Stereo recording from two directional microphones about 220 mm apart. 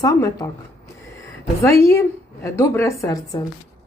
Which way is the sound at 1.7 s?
15° left (ahead or behind).